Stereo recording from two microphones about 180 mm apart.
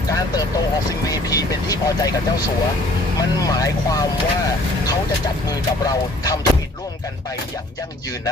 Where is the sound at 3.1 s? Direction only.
20° left (ahead or behind).